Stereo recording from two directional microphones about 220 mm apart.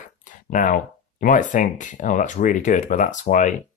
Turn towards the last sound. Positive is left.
turn(degrees=35)  # may be behind; listen again after turning